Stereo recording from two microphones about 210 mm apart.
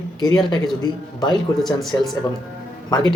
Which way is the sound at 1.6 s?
Centre (ahead or behind).